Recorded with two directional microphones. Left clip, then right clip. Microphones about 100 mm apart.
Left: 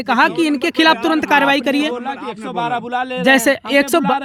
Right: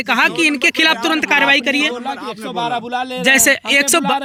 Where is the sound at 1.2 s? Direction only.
80° left.